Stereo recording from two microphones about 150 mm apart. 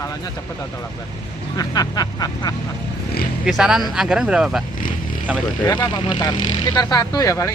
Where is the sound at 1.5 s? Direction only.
25° left (ahead or behind).